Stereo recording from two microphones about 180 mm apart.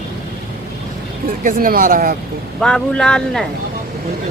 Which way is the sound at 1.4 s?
50° right (ahead or behind).